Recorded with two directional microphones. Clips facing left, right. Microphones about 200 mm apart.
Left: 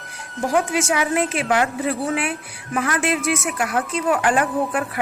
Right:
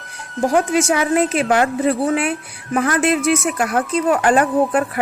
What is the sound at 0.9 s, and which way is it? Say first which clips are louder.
A woman's voice: right 4 dB; 40° right (ahead or behind).